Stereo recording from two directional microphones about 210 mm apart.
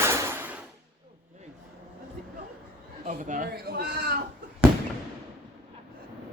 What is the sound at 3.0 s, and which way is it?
Speech, 35° right (ahead or behind).